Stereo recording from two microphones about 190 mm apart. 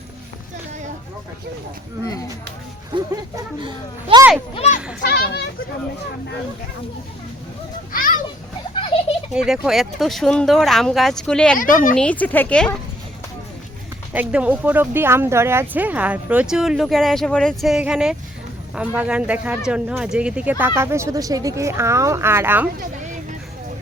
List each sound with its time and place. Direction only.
2.9 s speech: 25° right (ahead or behind)
4.5 s a child's voice: 35° left (ahead or behind)
5.0 s speech: 55° left (ahead or behind)
7.9 s children playing: 45° left (ahead or behind)
9.3 s speech: 5° right (ahead or behind)
11.5 s speech: 45° left (ahead or behind)
11.9 s speech: 5° left (ahead or behind)
14.1 s speech: 5° right (ahead or behind)